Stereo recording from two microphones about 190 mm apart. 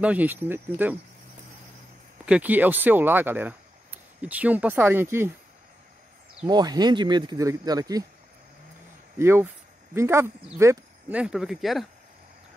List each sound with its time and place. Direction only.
0.0 s speech: 10° right (ahead or behind)
2.2 s speech: 5° right (ahead or behind)
6.4 s speech: 20° right (ahead or behind)
9.2 s speech: 10° right (ahead or behind)